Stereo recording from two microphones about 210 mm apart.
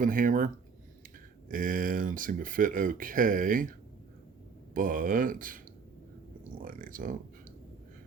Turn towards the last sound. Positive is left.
turn(degrees=-40)  # may be behind; listen again after turning